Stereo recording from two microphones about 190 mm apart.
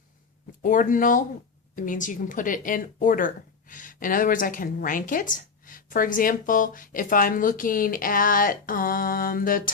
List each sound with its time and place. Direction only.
0.6 s speech: 45° left (ahead or behind)